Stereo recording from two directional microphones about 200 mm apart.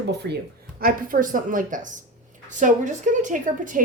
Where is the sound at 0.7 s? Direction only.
45° right (ahead or behind).